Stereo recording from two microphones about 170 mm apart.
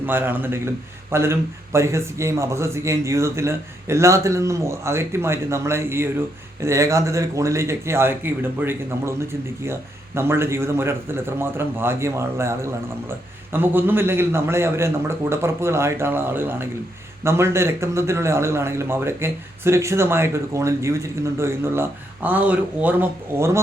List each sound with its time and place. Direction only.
0.0 s a man's voice: 10° right (ahead or behind)
10.2 s a man's voice: 15° right (ahead or behind)